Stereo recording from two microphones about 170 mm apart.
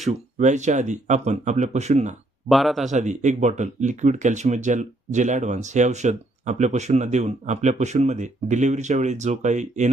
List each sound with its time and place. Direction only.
0.0 s speech: 45° right (ahead or behind)
2.5 s speech: centre (ahead or behind)
2.9 s speech: 45° right (ahead or behind)